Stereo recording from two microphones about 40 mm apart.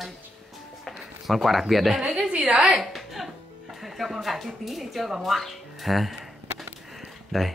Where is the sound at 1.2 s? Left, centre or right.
Centre.